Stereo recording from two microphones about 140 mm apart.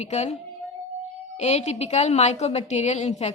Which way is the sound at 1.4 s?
50° left (ahead or behind).